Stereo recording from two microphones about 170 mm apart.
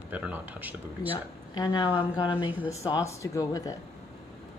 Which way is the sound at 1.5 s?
25° left (ahead or behind).